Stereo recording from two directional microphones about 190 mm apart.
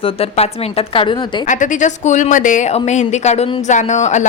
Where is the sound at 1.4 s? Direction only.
40° left (ahead or behind).